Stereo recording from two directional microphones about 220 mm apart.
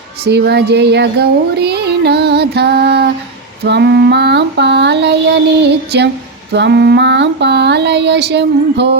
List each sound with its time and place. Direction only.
0.3 s music: 50° right (ahead or behind)